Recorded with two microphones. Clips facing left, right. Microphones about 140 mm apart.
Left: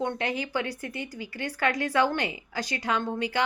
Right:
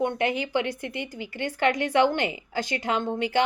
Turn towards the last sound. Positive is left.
turn(degrees=-25)  # may be behind; listen again after turning